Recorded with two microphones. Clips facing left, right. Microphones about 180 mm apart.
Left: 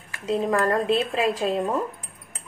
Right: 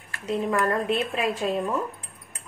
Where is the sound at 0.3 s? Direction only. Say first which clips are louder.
Left 2 dB; 35° left (ahead or behind).